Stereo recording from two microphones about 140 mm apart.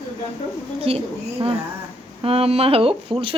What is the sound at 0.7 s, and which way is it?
Speech, 45° right (ahead or behind).